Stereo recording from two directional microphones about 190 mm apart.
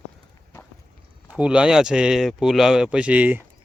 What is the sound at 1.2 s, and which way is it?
Speech, 5° right (ahead or behind).